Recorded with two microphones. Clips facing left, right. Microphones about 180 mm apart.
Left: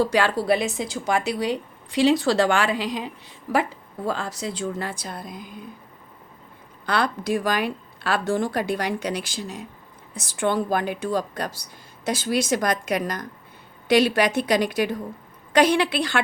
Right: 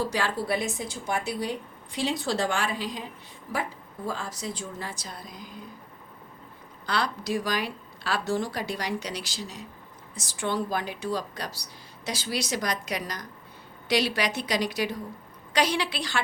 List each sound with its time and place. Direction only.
0.1 s a woman's voice: 75° left (ahead or behind); by 5.5 s 55° left (ahead or behind)
6.8 s a woman's voice: 55° left (ahead or behind)